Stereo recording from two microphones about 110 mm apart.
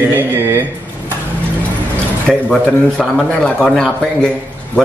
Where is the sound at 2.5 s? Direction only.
10° left (ahead or behind).